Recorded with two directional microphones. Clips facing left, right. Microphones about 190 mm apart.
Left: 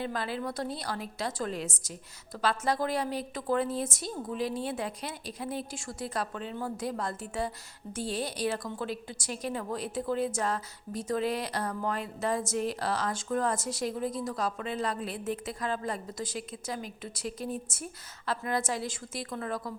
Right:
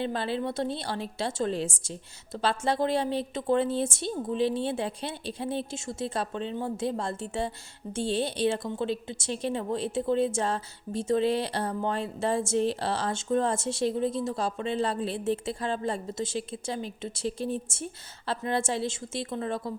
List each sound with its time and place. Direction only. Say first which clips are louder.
0.0 s a woman's voice: right 4 dB; 30° right (ahead or behind)